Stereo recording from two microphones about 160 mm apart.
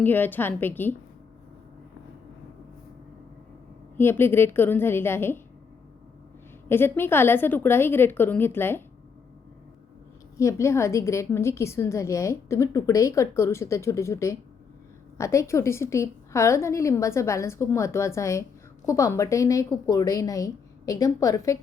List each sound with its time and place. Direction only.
0.0 s a woman's voice: 10° left (ahead or behind)
3.9 s a woman's voice: 15° left (ahead or behind)
6.7 s a woman's voice: 15° left (ahead or behind)
10.3 s a woman's voice: 20° left (ahead or behind)